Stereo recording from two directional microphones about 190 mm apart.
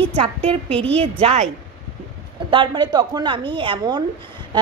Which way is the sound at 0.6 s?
5° left (ahead or behind).